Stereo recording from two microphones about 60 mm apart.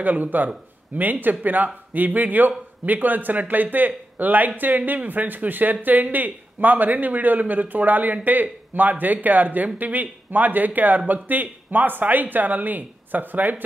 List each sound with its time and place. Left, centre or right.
0.0 s a man's voice: right